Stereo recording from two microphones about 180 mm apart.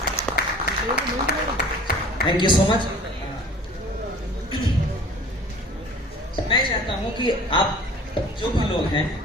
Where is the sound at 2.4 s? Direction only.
25° left (ahead or behind).